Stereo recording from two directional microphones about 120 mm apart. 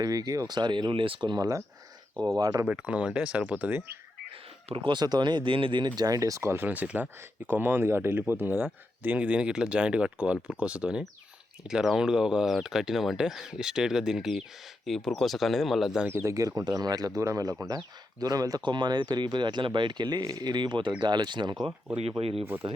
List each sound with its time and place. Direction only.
0.0 s speech: 30° right (ahead or behind)
2.6 s speech: 10° right (ahead or behind)
4.7 s speech: 45° right (ahead or behind); by 16.0 s centre (ahead or behind)
16.0 s speech: 20° right (ahead or behind); by 21.7 s 40° right (ahead or behind)
22.2 s speech: 55° right (ahead or behind)